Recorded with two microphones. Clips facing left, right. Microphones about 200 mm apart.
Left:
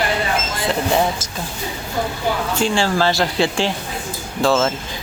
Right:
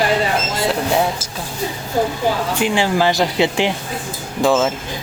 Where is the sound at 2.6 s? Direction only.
15° right (ahead or behind).